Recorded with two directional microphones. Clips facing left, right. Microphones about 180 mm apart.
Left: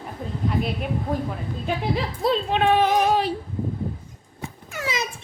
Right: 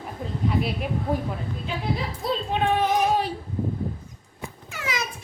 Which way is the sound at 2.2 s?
90° left.